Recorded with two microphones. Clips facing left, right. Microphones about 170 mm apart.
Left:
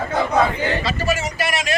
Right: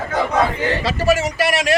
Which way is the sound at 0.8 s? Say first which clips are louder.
Right 5 dB; 70° right (ahead or behind).